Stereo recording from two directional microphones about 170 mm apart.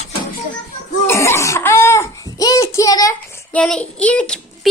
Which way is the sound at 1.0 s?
15° left (ahead or behind).